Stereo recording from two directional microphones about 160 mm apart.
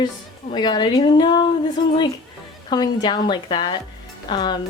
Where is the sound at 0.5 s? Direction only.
30° left (ahead or behind).